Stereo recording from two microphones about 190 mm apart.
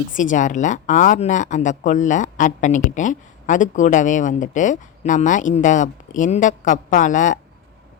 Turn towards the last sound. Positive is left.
turn(degrees=40)  # may be behind; listen again after turning